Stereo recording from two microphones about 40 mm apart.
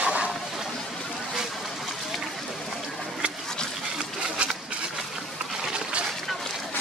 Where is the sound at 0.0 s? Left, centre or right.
Right.